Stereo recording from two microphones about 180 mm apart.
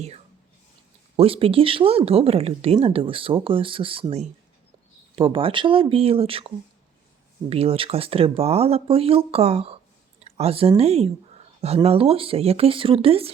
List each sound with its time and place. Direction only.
1.1 s speech: 30° right (ahead or behind)
7.5 s speech: 35° right (ahead or behind)